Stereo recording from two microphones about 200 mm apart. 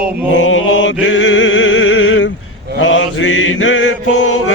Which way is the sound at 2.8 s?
75° left (ahead or behind).